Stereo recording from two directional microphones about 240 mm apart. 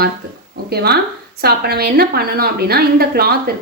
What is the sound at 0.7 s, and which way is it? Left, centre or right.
A woman's voice, right.